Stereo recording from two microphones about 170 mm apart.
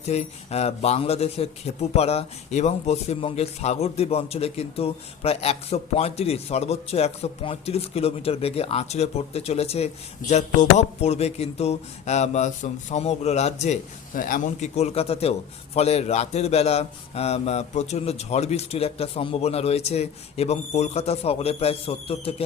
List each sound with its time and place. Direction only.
0.0 s speech: 40° left (ahead or behind)